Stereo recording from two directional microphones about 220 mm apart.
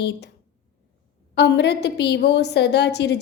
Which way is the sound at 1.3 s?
50° left (ahead or behind).